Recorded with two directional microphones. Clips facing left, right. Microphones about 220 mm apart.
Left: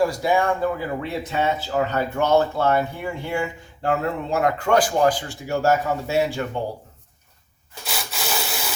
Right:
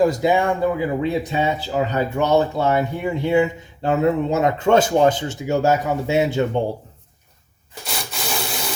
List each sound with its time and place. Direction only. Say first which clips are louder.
0.0 s speech: right 3 dB; 20° right (ahead or behind)
7.9 s printer: right 1 dB; 5° left (ahead or behind)